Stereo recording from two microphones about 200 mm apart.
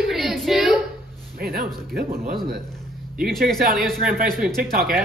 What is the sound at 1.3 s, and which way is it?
Speech, 45° right (ahead or behind).